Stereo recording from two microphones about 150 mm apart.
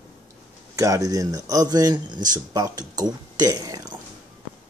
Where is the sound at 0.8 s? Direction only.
25° right (ahead or behind).